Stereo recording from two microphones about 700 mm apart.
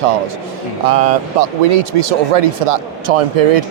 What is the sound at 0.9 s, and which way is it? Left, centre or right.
Speech, right.